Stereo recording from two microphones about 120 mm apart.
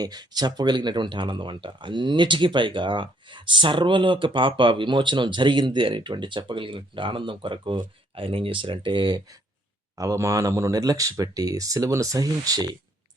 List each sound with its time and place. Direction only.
0.0 s speech: 35° right (ahead or behind)
10.0 s speech: 25° right (ahead or behind)